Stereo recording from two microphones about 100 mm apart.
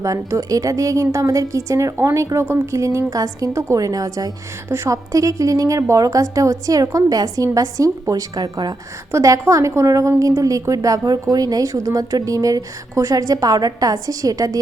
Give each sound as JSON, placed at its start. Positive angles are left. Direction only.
{"t": 0.0, "sound": "a woman's voice", "side_deg": -35}
{"t": 9.1, "sound": "a woman's voice", "side_deg": -30}